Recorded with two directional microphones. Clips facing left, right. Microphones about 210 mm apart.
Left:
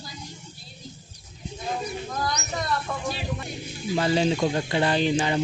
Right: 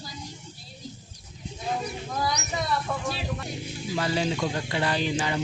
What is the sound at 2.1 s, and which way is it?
Speech, 5° right (ahead or behind).